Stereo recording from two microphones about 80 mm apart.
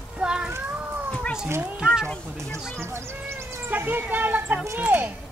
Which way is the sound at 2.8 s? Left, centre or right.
Right.